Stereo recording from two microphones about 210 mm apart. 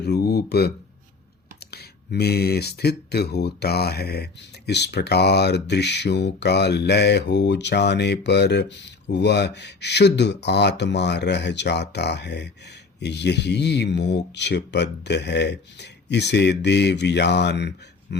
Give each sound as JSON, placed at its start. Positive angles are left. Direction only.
{"t": 0.0, "sound": "speech", "side_deg": 50}